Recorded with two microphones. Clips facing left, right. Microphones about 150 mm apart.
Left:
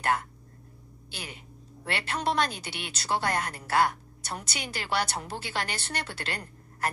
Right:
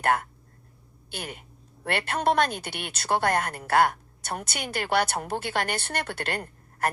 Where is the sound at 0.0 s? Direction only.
55° right (ahead or behind).